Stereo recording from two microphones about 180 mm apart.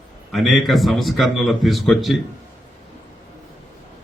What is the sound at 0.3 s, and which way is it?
A man's voice, centre (ahead or behind).